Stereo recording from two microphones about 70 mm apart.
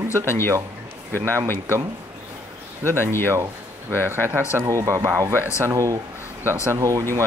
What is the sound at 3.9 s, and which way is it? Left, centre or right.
Speech, right.